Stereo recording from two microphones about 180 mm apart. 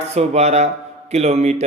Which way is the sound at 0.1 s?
35° right (ahead or behind).